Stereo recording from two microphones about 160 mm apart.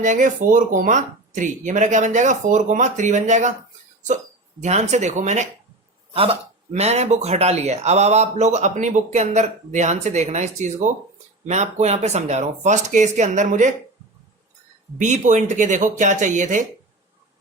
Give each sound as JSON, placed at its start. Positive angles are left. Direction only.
{"t": 0.0, "sound": "speech", "side_deg": -55}
{"t": 4.6, "sound": "speech", "side_deg": -45}
{"t": 14.9, "sound": "speech", "side_deg": -50}